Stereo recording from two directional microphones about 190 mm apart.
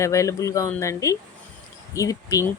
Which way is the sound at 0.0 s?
15° left (ahead or behind).